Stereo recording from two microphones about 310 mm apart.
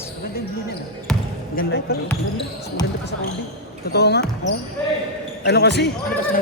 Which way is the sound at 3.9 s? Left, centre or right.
Left.